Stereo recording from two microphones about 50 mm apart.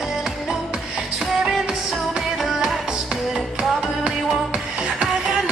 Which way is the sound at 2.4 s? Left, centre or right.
Centre.